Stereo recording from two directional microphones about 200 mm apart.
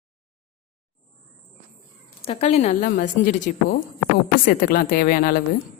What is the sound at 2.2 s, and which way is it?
A woman's voice, 30° left (ahead or behind).